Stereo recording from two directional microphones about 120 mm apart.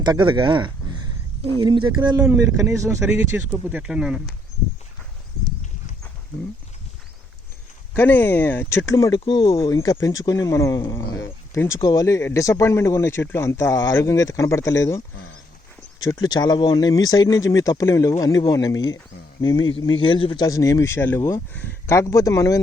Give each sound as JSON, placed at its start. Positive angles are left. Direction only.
{"t": 0.0, "sound": "speech", "side_deg": -40}
{"t": 7.9, "sound": "speech", "side_deg": 15}
{"t": 11.2, "sound": "a sound", "side_deg": 20}
{"t": 11.9, "sound": "speech", "side_deg": 25}
{"t": 16.0, "sound": "speech", "side_deg": 30}
{"t": 19.8, "sound": "speech", "side_deg": 45}
{"t": 20.4, "sound": "speech", "side_deg": 25}